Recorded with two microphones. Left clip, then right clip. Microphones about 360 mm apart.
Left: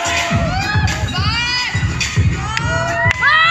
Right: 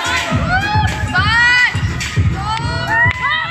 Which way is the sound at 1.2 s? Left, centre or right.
Right.